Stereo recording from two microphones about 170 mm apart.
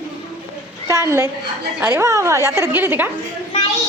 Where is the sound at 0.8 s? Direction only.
15° right (ahead or behind).